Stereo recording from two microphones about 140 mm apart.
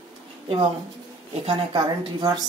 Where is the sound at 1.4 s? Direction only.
40° right (ahead or behind).